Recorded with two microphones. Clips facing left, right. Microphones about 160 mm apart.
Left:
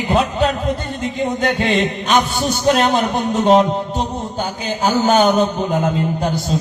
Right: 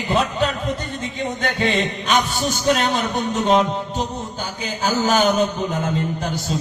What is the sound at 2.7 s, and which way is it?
Music, 40° left (ahead or behind).